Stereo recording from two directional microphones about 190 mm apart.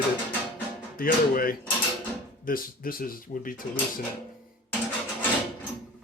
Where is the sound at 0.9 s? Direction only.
50° left (ahead or behind).